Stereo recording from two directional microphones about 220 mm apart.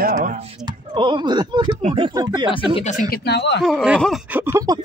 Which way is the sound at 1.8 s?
25° right (ahead or behind).